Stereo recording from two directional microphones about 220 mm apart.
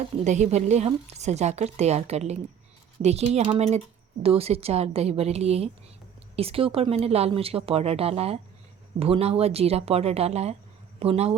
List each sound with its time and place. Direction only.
0.3 s a woman's voice: 30° right (ahead or behind)